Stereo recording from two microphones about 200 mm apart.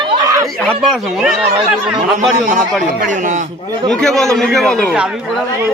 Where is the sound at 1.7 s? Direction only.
Centre (ahead or behind).